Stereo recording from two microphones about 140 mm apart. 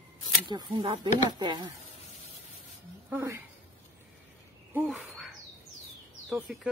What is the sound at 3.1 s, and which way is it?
Speech, 15° right (ahead or behind).